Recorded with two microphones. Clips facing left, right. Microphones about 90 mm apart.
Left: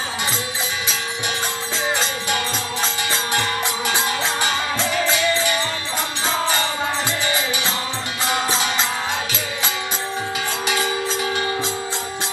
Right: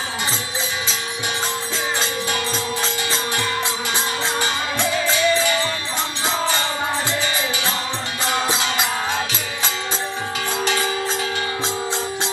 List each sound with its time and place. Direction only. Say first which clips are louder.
4.5 s music: even; 20° right (ahead or behind)
10.6 s music: right 1 dB; 15° left (ahead or behind)